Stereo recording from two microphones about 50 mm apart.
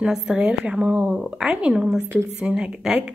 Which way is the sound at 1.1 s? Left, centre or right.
Centre.